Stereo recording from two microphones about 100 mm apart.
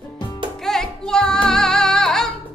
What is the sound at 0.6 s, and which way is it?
Music, 5° left (ahead or behind).